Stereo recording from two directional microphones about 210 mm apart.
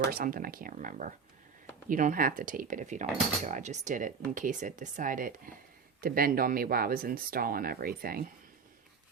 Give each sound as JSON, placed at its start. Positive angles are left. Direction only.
{"t": 0.0, "sound": "speech", "side_deg": -45}